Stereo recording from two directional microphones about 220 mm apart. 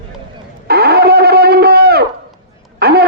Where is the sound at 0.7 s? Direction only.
45° right (ahead or behind).